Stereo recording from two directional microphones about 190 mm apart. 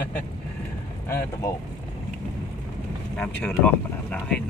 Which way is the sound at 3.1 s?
5° left (ahead or behind).